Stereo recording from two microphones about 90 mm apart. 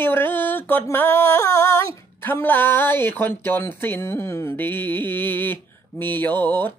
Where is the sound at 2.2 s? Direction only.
25° left (ahead or behind).